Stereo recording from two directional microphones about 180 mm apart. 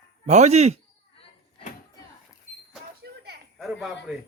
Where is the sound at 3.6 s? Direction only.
Centre (ahead or behind).